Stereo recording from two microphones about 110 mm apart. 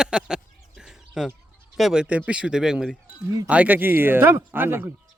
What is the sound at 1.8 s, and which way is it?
Speech, centre (ahead or behind).